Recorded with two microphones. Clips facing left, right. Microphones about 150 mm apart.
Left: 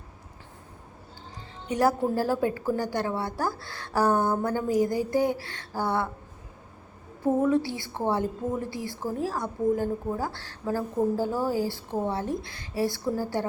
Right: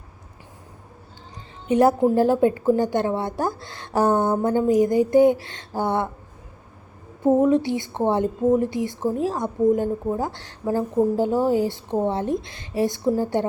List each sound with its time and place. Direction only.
1.6 s a woman's voice: 20° right (ahead or behind)
7.3 s a woman's voice: 20° right (ahead or behind)